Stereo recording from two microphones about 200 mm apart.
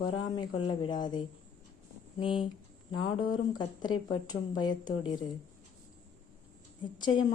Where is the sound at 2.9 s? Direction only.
90° left.